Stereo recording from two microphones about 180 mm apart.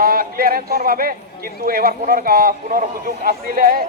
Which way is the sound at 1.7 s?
55° right (ahead or behind).